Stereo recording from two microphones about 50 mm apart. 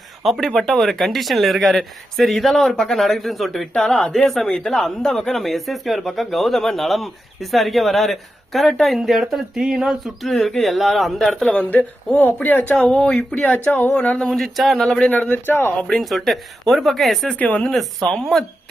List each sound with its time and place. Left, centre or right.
0.3 s speech: centre
4.4 s speech: centre
10.2 s speech: centre
11.8 s speech: left
14.3 s speech: centre
15.0 s speech: left
15.9 s speech: centre
17.3 s speech: left
17.6 s speech: centre